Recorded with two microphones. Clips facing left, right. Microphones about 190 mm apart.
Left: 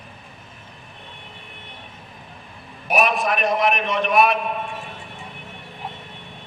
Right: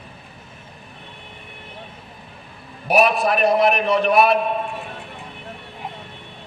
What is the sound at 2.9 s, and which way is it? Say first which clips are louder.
A man's voice: right 3 dB; 35° right (ahead or behind).